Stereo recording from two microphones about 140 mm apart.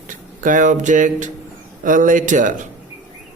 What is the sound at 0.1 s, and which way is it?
Speech, 70° right (ahead or behind).